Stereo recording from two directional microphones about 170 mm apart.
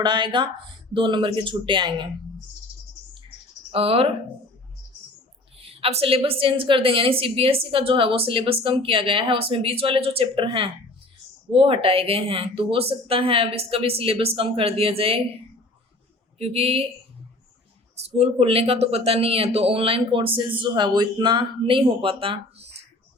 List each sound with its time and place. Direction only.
0.0 s speech: 25° right (ahead or behind)
3.7 s speech: 35° right (ahead or behind)
5.5 s a woman's voice: 35° right (ahead or behind)
16.4 s a woman's voice: 35° right (ahead or behind)
18.2 s a woman's voice: 35° right (ahead or behind)